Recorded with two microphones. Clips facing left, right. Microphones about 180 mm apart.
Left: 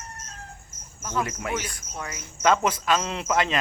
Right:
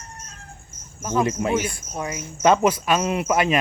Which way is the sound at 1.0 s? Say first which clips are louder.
Right 7 dB; 20° right (ahead or behind).